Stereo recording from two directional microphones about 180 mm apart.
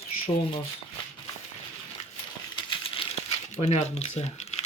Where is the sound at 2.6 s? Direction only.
30° left (ahead or behind).